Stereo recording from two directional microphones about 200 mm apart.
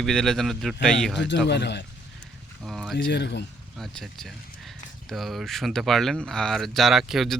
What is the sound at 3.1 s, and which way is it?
Speech, 60° left (ahead or behind).